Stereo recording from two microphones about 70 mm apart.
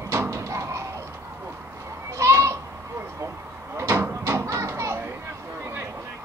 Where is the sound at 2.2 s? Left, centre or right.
Right.